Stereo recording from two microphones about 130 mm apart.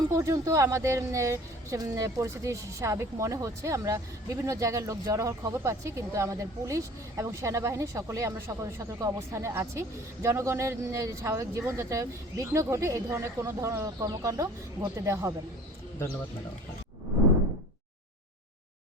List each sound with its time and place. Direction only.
0.1 s speech: 20° right (ahead or behind)